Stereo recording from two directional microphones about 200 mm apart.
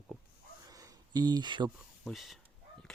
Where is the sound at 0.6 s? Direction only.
20° right (ahead or behind).